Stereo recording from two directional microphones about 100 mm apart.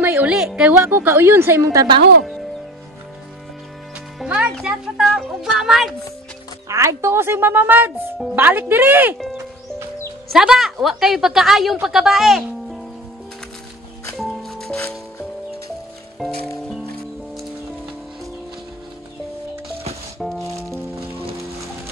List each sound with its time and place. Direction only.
0.0 s a woman's voice: 15° right (ahead or behind)
0.7 s a woman's voice: 20° right (ahead or behind)
4.2 s a woman's voice: 10° right (ahead or behind)
6.7 s a woman's voice: 30° right (ahead or behind)
10.3 s a woman's voice: 5° right (ahead or behind)
14.1 s music: centre (ahead or behind)
16.2 s music: centre (ahead or behind)
20.2 s music: centre (ahead or behind)